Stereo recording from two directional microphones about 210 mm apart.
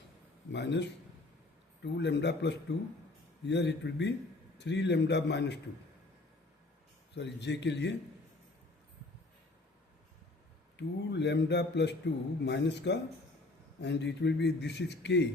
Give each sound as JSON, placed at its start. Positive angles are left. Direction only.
{"t": 0.5, "sound": "speech", "side_deg": 55}
{"t": 7.1, "sound": "speech", "side_deg": 55}
{"t": 10.8, "sound": "speech", "side_deg": 55}